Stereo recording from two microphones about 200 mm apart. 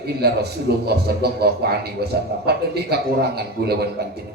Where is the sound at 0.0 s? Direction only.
55° right (ahead or behind).